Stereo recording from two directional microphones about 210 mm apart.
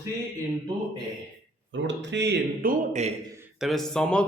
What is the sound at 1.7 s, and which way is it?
Speech, 60° right (ahead or behind).